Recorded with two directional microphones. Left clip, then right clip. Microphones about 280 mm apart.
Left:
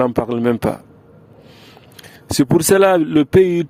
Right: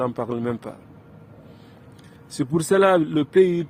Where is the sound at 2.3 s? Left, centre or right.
Left.